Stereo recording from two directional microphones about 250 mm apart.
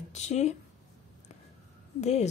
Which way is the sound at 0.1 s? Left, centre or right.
Left.